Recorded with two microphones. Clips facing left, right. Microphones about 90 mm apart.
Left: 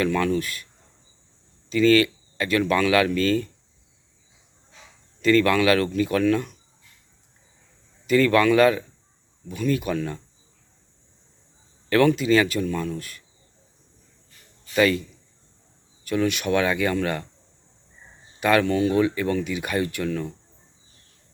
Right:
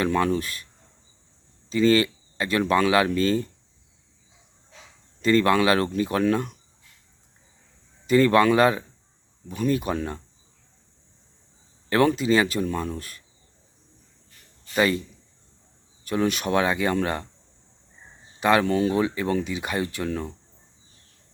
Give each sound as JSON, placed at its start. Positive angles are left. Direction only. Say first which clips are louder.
{"t": 0.0, "sound": "speech", "louder": "even", "side_deg": -30}
{"t": 1.7, "sound": "speech", "louder": "left 2 dB", "side_deg": -30}
{"t": 5.2, "sound": "speech", "louder": "left 1 dB", "side_deg": -30}
{"t": 8.0, "sound": "speech", "louder": "even", "side_deg": -30}
{"t": 11.9, "sound": "speech", "louder": "left 2 dB", "side_deg": -25}
{"t": 14.8, "sound": "speech", "louder": "left 2 dB", "side_deg": -25}
{"t": 16.0, "sound": "speech", "louder": "left 1 dB", "side_deg": -35}
{"t": 18.3, "sound": "speech", "louder": "even", "side_deg": -25}